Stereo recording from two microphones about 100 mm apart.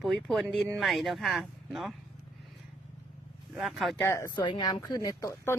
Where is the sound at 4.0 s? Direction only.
25° left (ahead or behind).